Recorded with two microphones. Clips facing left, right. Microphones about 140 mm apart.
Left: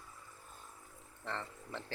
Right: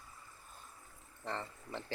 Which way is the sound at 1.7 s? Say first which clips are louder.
Right 1 dB; 5° right (ahead or behind).